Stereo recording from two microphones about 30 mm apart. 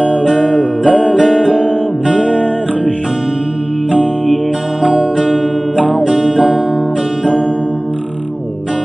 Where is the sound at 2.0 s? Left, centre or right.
Right.